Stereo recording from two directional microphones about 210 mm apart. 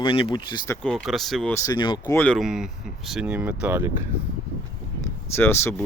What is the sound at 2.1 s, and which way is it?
Speech, 5° left (ahead or behind).